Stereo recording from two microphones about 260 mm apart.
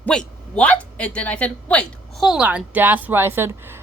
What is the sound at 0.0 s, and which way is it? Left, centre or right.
Speech, centre.